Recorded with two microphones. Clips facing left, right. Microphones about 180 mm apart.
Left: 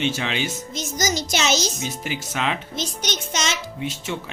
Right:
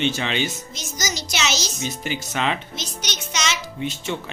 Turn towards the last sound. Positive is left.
turn(degrees=5)  # may be behind; listen again after turning